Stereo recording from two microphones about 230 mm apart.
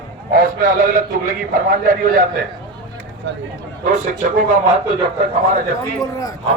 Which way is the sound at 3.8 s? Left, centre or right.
Right.